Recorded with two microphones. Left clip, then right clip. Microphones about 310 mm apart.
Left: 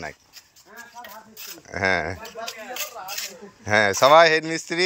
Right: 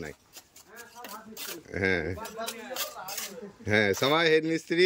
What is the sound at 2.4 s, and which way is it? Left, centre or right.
Speech, right.